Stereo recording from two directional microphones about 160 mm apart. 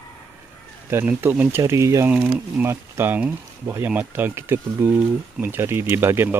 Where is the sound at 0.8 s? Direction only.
15° right (ahead or behind).